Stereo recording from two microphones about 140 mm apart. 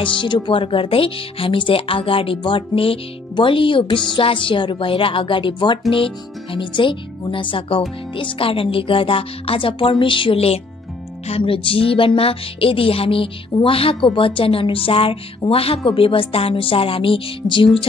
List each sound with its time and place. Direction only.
0.2 s speech: 35° left (ahead or behind)